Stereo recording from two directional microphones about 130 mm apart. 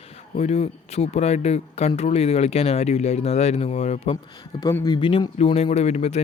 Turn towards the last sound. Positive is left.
turn(degrees=55)  # may be behind; listen again after turning